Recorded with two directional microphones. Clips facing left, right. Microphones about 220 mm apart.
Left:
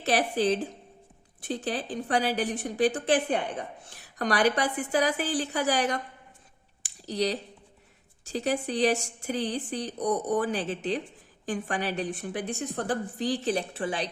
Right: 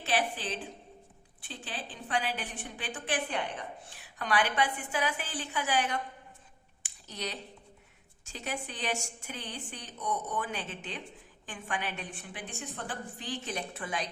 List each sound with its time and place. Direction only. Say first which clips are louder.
0.0 s a woman's voice: left 7 dB; 40° left (ahead or behind)
6.8 s a sound: left 11 dB; 35° left (ahead or behind)
8.2 s a woman's voice: left 10 dB; 35° left (ahead or behind)